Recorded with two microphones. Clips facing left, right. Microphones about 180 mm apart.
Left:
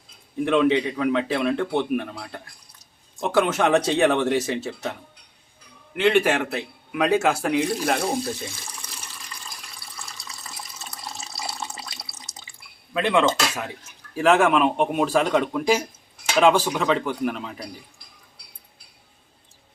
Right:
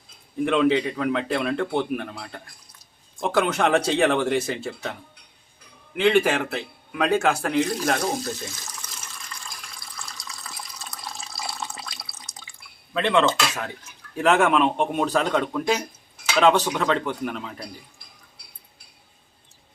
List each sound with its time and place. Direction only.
0.4 s a man's voice: centre (ahead or behind)
8.4 s speech: 30° left (ahead or behind)
11.1 s water: 20° left (ahead or behind)
12.9 s a man's voice: 5° left (ahead or behind)